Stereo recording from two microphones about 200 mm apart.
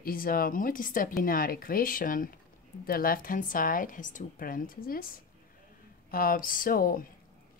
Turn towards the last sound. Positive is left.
turn(degrees=45)  # may be behind; listen again after turning